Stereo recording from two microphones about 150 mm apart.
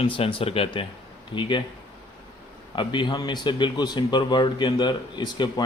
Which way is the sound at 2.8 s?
30° left (ahead or behind).